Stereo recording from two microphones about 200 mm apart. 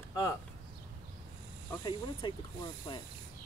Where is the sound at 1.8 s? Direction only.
25° left (ahead or behind).